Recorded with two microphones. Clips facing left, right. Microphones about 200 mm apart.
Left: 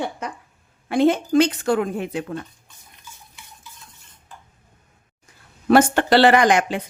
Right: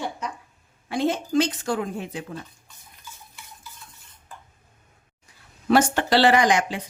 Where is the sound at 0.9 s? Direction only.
60° left (ahead or behind).